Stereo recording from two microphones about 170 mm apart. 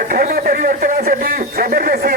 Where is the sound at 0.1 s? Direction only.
60° right (ahead or behind).